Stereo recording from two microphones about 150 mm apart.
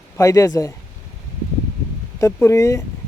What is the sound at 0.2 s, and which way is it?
Speech, 20° left (ahead or behind).